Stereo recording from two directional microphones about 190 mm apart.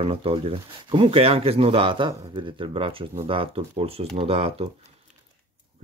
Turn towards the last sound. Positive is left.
turn(degrees=-30)  # may be behind; listen again after turning